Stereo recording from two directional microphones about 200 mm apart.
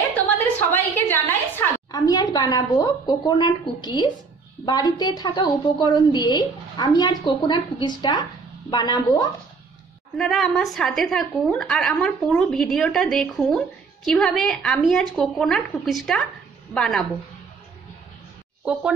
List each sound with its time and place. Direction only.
0.7 s a sound: 10° left (ahead or behind)
2.3 s a woman's voice: 20° left (ahead or behind)
10.1 s a woman's voice: centre (ahead or behind)
18.7 s a woman's voice: 5° right (ahead or behind)